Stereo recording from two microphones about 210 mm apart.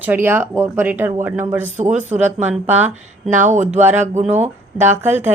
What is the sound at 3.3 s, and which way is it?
Speech, 35° right (ahead or behind).